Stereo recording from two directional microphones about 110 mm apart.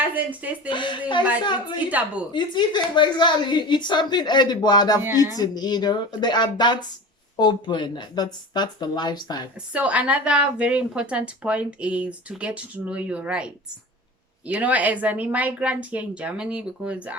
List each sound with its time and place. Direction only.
0.0 s speech: 15° right (ahead or behind)
0.7 s speech: 45° left (ahead or behind)
1.9 s a woman's voice: 15° right (ahead or behind)
2.3 s speech: 45° left (ahead or behind)
9.7 s a woman's voice: 10° right (ahead or behind)